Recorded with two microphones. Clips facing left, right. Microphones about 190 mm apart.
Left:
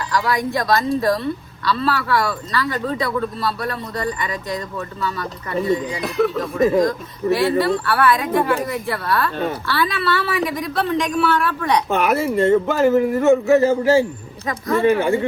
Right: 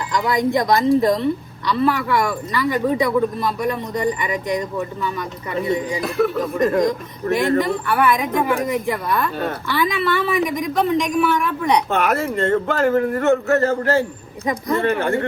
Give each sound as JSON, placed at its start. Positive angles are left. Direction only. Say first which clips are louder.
{"t": 0.1, "sound": "a woman's voice", "louder": "right 2 dB", "side_deg": -20}
{"t": 6.0, "sound": "speech", "louder": "even", "side_deg": 0}
{"t": 6.6, "sound": "speech", "louder": "left 2 dB", "side_deg": 5}
{"t": 7.6, "sound": "a woman's voice", "louder": "left 1 dB", "side_deg": -15}
{"t": 11.9, "sound": "speech", "louder": "left 1 dB", "side_deg": 15}
{"t": 12.1, "sound": "speech", "louder": "left 3 dB", "side_deg": 0}